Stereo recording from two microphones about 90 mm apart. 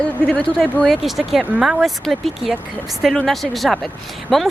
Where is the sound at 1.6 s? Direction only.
5° right (ahead or behind).